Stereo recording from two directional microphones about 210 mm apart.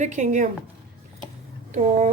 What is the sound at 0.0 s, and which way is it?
Speech, 35° right (ahead or behind).